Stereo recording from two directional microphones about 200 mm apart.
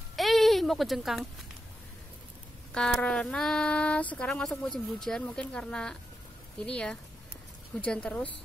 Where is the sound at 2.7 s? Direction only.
5° left (ahead or behind).